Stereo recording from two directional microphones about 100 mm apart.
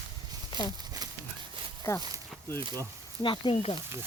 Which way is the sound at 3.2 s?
55° left (ahead or behind).